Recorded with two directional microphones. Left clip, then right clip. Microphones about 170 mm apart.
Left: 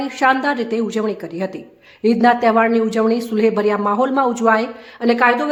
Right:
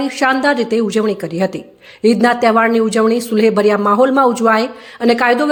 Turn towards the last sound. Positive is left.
turn(degrees=-20)  # may be behind; listen again after turning